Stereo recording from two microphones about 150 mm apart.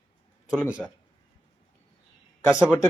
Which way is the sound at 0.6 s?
10° right (ahead or behind).